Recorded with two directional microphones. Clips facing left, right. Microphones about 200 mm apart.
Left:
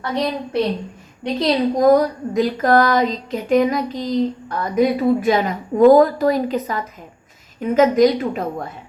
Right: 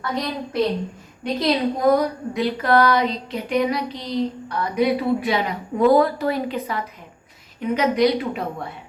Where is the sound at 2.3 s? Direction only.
45° left (ahead or behind).